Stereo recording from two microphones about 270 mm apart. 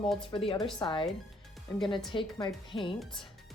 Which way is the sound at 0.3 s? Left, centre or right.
Centre.